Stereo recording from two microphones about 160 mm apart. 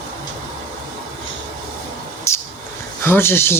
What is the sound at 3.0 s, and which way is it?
Speech, 15° left (ahead or behind).